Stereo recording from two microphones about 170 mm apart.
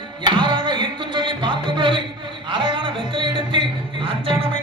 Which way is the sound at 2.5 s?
30° right (ahead or behind).